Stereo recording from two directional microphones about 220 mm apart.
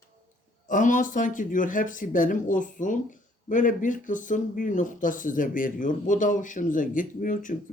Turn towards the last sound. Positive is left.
turn(degrees=35)  # may be behind; listen again after turning